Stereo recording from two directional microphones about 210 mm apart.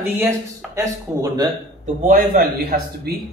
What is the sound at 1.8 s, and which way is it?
A man's voice, 40° right (ahead or behind).